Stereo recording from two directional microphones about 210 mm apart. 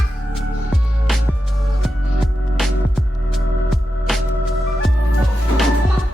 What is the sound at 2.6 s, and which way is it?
Music, centre (ahead or behind).